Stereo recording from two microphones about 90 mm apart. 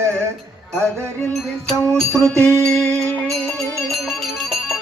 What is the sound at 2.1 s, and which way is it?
Music, 35° right (ahead or behind).